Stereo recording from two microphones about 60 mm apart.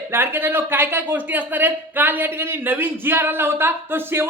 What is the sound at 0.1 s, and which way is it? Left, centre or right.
A man's voice, right.